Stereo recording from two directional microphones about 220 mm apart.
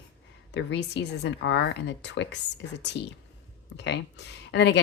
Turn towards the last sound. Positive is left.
turn(degrees=50)  # may be behind; listen again after turning